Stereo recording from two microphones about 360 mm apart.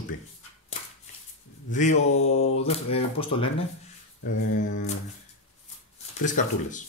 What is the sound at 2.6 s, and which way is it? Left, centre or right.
Speech, centre.